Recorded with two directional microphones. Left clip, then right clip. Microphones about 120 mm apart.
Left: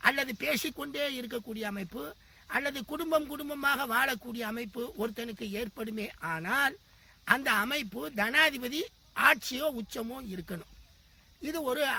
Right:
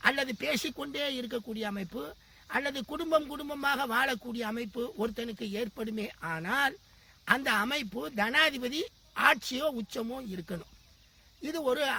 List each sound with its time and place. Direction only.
0.0 s speech: 25° left (ahead or behind)